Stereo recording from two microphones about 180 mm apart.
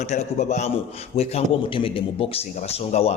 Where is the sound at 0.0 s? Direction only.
40° left (ahead or behind).